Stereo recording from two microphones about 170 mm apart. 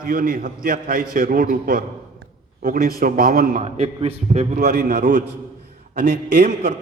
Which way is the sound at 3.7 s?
35° right (ahead or behind).